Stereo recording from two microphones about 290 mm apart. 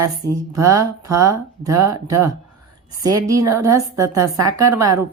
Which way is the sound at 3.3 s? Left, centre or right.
Right.